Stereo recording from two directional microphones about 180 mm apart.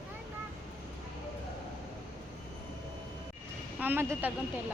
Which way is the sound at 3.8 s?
10° right (ahead or behind).